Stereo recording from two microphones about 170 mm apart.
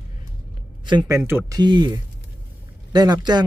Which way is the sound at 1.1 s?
15° right (ahead or behind).